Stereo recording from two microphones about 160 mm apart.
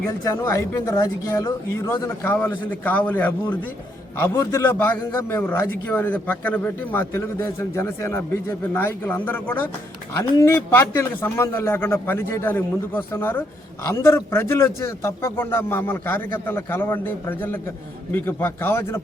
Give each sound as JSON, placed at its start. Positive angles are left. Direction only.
{"t": 0.3, "sound": "speech", "side_deg": 20}
{"t": 2.3, "sound": "a man's voice", "side_deg": 10}